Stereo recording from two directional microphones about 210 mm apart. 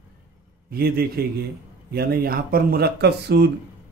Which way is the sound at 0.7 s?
45° right (ahead or behind).